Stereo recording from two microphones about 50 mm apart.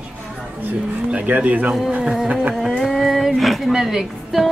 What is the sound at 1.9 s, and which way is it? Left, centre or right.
Music, right.